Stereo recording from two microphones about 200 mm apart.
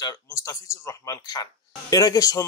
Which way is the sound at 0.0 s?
15° left (ahead or behind).